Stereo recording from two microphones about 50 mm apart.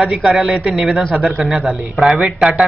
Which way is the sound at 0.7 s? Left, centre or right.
Centre.